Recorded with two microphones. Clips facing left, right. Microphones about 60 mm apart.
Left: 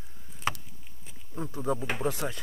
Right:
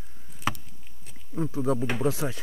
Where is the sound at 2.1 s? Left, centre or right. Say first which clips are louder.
Right 3 dB; right.